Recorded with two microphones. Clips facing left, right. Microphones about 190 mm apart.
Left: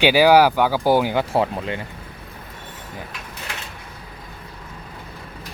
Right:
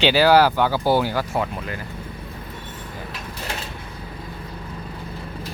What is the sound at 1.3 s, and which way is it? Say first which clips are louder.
Speech: left 4 dB; 25° left (ahead or behind).